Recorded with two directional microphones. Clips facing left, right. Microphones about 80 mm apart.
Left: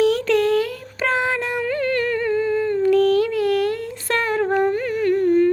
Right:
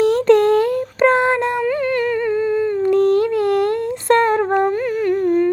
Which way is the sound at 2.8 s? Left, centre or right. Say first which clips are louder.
Right 1 dB; right.